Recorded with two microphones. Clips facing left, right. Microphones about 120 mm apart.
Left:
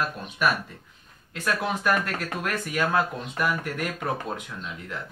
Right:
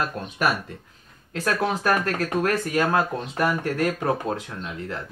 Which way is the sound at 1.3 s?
40° right (ahead or behind).